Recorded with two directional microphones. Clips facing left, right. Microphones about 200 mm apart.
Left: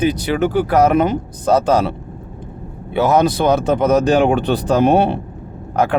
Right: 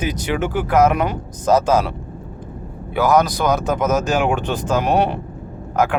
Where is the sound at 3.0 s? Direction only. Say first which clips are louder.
Left 2 dB; 25° left (ahead or behind).